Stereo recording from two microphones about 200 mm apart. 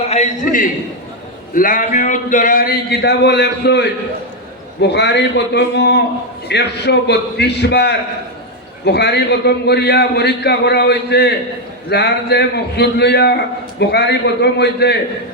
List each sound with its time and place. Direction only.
0.1 s a man's voice: 35° left (ahead or behind); by 14.9 s 55° left (ahead or behind)